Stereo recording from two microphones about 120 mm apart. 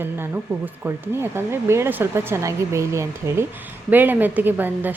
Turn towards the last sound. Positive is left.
turn(degrees=-15)  # may be behind; listen again after turning